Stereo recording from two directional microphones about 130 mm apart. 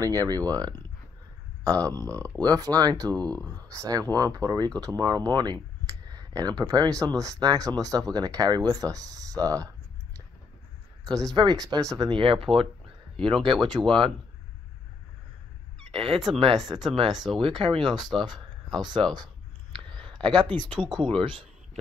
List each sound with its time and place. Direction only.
0.0 s speech: 30° right (ahead or behind)
1.9 s speech: 25° right (ahead or behind)
3.3 s speech: 10° left (ahead or behind)
3.7 s speech: 25° right (ahead or behind)
11.3 s speech: 30° right (ahead or behind)
12.2 s speech: 45° right (ahead or behind)
15.9 s speech: 45° right (ahead or behind)
17.1 s speech: centre (ahead or behind)
17.4 s speech: 45° right (ahead or behind)